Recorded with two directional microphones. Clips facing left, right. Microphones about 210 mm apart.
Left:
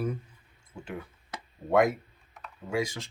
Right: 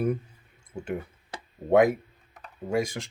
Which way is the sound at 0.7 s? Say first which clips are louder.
Right 8 dB; 45° right (ahead or behind).